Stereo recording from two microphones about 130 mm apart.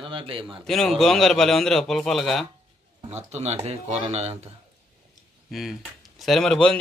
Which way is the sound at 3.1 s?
60° right (ahead or behind).